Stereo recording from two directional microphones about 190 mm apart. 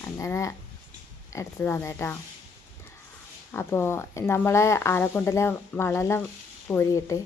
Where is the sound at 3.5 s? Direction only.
15° left (ahead or behind).